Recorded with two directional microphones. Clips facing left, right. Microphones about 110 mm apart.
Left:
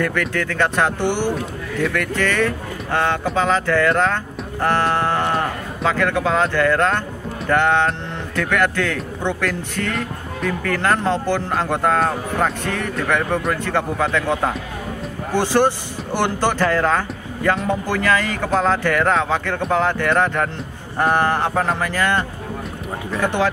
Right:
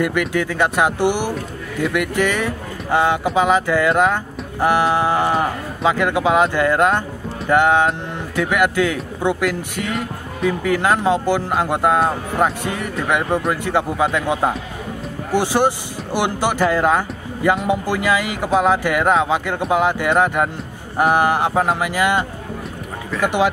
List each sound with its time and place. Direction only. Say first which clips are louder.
0.0 s speech: right 2 dB; 15° right (ahead or behind)
23.2 s speech: right 2 dB; 15° right (ahead or behind)